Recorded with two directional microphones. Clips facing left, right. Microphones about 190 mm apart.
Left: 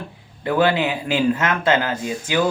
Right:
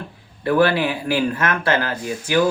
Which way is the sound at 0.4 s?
20° left (ahead or behind).